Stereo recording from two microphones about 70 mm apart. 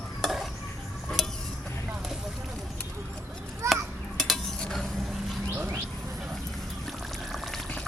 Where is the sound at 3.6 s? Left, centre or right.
Right.